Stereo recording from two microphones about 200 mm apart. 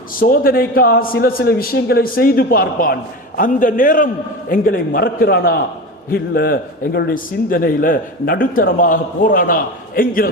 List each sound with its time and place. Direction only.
0.2 s a man's voice: 45° left (ahead or behind)